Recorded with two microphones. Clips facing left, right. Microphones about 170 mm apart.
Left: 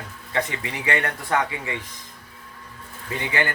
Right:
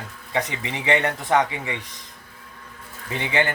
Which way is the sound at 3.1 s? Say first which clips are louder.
Right 2 dB; 20° right (ahead or behind).